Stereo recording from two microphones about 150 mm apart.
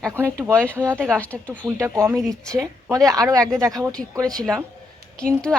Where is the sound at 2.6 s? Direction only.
20° right (ahead or behind).